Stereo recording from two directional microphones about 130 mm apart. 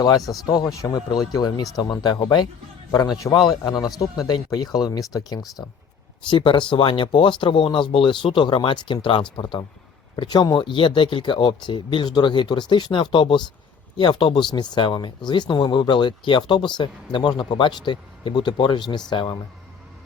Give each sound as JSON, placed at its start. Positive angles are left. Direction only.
{"t": 0.4, "sound": "speech", "side_deg": 25}
{"t": 5.6, "sound": "speech", "side_deg": 15}
{"t": 6.3, "sound": "speech", "side_deg": 40}